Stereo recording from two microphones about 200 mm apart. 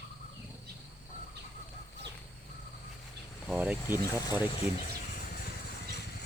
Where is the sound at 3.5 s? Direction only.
5° right (ahead or behind).